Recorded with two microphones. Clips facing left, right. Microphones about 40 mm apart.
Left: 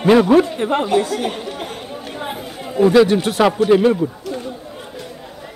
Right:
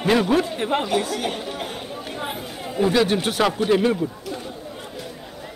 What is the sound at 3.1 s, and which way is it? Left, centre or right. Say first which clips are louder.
Speech: left 5 dB; right.